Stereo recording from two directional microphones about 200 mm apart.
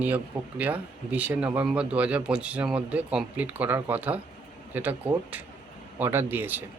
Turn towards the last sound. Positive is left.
turn(degrees=-10)  # may be behind; listen again after turning